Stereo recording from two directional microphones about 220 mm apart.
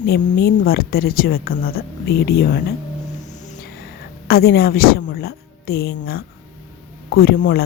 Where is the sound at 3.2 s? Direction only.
35° left (ahead or behind); by 6.2 s 50° left (ahead or behind).